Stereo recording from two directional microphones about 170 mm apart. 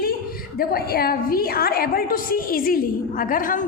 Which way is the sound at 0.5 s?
65° left (ahead or behind).